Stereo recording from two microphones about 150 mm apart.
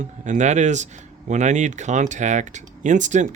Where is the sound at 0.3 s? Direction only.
50° right (ahead or behind).